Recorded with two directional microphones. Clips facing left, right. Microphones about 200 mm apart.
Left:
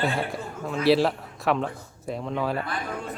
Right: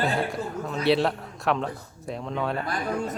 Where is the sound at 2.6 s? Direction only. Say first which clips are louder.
Right 4 dB; 40° right (ahead or behind).